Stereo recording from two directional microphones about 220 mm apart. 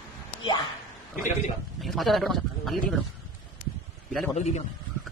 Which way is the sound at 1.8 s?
Centre (ahead or behind).